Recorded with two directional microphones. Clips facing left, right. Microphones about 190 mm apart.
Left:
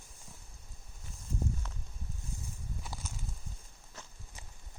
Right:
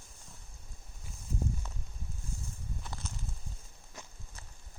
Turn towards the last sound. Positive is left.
turn(degrees=-15)  # may be behind; listen again after turning